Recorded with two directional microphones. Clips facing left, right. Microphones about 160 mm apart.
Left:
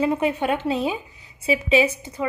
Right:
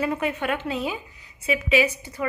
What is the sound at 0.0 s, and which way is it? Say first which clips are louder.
A woman's voice: left 4 dB; 25° left (ahead or behind).